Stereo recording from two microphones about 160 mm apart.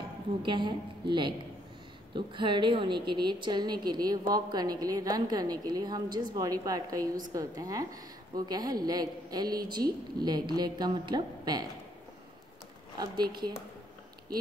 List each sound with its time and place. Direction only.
0.4 s a woman's voice: 30° right (ahead or behind)
12.9 s speech: 30° right (ahead or behind)